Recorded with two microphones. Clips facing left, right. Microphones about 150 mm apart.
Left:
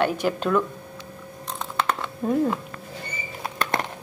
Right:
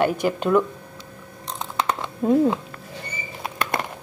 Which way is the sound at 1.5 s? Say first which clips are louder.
Right 1 dB; 15° right (ahead or behind).